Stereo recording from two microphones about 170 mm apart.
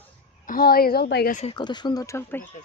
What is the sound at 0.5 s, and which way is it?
Speech, 60° left (ahead or behind).